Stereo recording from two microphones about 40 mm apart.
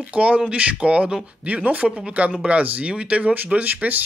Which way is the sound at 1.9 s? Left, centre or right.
Right.